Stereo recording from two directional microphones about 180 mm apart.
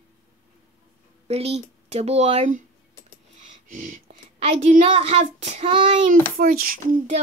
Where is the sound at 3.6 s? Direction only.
45° right (ahead or behind).